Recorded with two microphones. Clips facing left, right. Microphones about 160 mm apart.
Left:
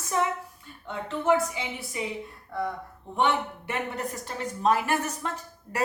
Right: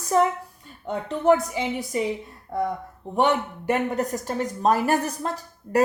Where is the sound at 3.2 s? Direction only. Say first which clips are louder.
Right 4 dB; 40° right (ahead or behind).